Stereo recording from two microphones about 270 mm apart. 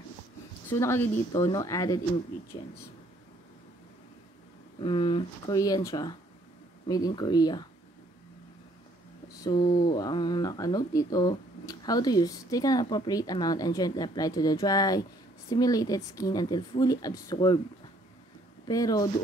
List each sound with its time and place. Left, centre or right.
0.7 s speech: centre
4.7 s speech: centre
9.4 s speech: centre
18.7 s speech: centre